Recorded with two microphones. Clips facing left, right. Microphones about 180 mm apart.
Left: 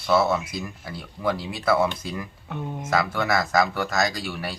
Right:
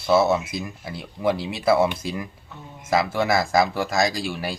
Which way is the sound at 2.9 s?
25° right (ahead or behind).